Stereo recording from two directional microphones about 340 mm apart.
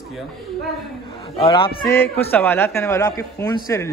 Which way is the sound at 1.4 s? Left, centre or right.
Centre.